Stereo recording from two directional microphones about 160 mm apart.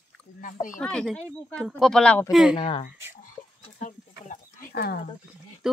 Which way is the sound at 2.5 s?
40° left (ahead or behind).